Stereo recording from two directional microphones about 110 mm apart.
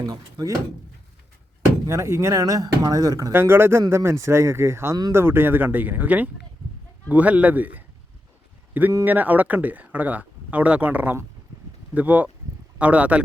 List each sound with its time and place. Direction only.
0.0 s speech: 35° right (ahead or behind)
1.9 s speech: 25° right (ahead or behind)
3.3 s speech: 20° right (ahead or behind)
9.0 s speech: 15° right (ahead or behind)